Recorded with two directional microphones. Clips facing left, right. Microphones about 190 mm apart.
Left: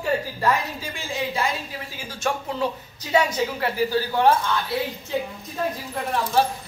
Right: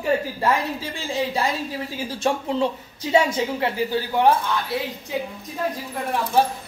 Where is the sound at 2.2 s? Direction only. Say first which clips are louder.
Right 3 dB; 25° right (ahead or behind).